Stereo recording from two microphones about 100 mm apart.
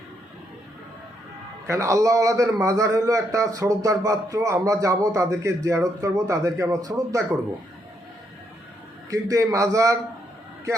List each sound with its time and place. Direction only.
1.6 s a man's voice: 30° right (ahead or behind)
9.0 s a man's voice: 35° right (ahead or behind)